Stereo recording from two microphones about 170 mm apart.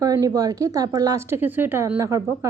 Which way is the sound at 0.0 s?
20° right (ahead or behind).